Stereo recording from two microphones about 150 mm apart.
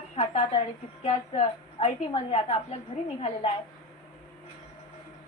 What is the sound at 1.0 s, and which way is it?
A woman's voice, 40° left (ahead or behind).